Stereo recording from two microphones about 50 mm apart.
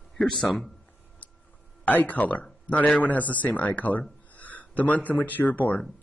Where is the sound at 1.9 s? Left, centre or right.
Left.